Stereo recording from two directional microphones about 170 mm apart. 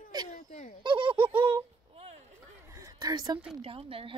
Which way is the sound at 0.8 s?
30° right (ahead or behind).